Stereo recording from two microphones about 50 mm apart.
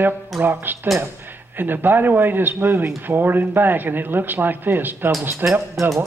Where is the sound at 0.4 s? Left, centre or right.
Right.